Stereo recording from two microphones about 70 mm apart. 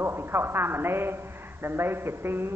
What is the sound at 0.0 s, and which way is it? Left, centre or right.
A man's voice, right.